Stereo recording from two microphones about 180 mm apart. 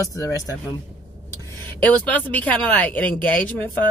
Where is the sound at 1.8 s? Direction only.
10° left (ahead or behind).